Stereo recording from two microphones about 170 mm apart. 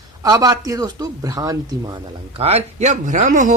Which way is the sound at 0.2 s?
25° right (ahead or behind).